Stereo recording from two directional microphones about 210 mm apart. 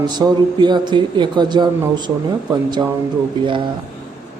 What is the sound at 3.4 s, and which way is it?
Speech, 20° right (ahead or behind).